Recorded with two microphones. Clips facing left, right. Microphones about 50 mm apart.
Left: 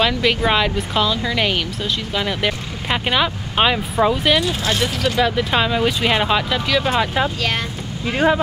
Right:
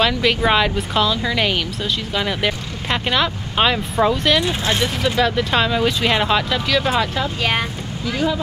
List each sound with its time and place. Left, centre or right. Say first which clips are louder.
0.0 s speech: even; centre
4.4 s speech: even; right
5.1 s speech: even; centre
8.0 s speech: left 4 dB; left